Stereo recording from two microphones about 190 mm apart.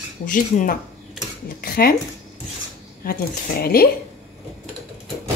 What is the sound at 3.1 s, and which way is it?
Speech, 55° left (ahead or behind).